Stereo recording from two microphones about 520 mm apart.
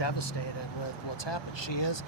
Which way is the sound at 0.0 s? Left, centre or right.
Left.